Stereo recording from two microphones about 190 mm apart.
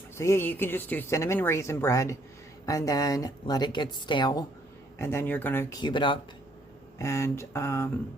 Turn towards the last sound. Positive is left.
turn(degrees=15)  # may be behind; listen again after turning